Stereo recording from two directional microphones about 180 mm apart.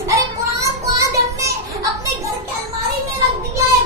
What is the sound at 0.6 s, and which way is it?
Child singing, 15° right (ahead or behind).